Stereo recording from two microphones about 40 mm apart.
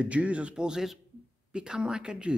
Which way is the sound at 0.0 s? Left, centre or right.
Right.